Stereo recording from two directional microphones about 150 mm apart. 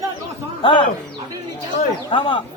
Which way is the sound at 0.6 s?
35° left (ahead or behind).